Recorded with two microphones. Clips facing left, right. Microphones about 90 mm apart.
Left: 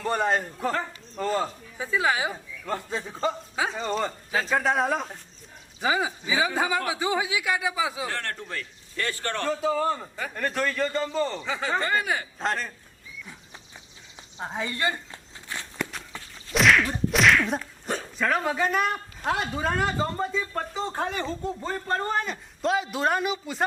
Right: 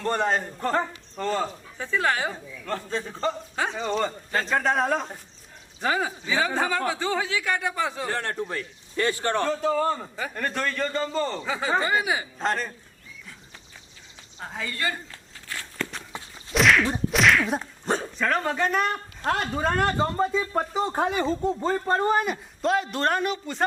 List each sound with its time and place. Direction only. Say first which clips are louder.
0.0 s a man's voice: even; 5° left (ahead or behind)
8.1 s a man's voice: right 4 dB; 15° right (ahead or behind)
9.5 s a man's voice: right 1 dB; 5° left (ahead or behind)
14.3 s a sound: left 2 dB; 20° left (ahead or behind)
16.1 s whip: right 3 dB; 15° right (ahead or behind)
16.5 s whip: right 1 dB; centre (ahead or behind)
17.6 s dog: right 4 dB; 30° right (ahead or behind)
18.2 s a man's voice: left 2 dB; 5° left (ahead or behind); by 22.4 s 10° right (ahead or behind)
22.6 s a man's voice: right 1 dB; centre (ahead or behind)